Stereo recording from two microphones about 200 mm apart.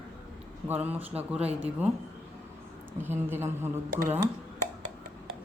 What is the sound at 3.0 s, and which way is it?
A woman's voice, 10° right (ahead or behind).